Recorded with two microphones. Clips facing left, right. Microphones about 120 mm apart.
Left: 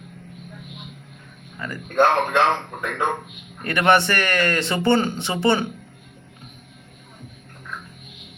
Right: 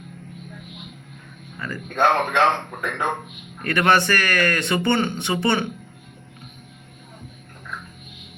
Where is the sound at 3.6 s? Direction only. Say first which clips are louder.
Left 1 dB; 20° left (ahead or behind).